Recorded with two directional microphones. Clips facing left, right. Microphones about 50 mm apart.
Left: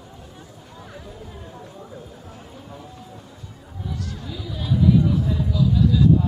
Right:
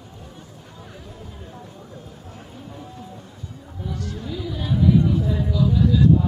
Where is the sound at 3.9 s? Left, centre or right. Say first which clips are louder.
Right 2 dB; centre.